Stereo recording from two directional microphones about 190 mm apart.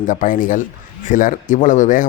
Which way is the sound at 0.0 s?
45° left (ahead or behind).